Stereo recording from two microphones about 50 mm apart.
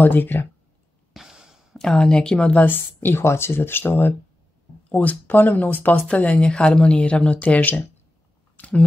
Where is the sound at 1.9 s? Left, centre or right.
Centre.